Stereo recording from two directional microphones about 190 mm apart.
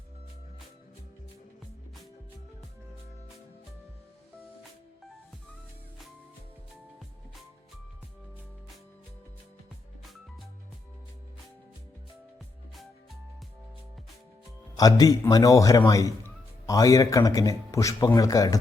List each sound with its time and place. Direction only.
14.8 s a man's voice: 20° left (ahead or behind)